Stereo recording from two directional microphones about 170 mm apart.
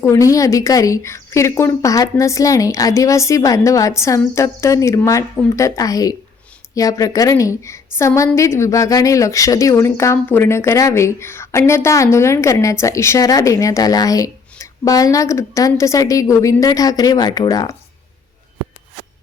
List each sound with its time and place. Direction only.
0.0 s a woman's voice: 20° left (ahead or behind)